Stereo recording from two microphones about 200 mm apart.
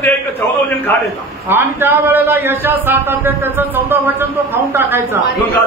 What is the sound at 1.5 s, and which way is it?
A man's voice, 10° right (ahead or behind).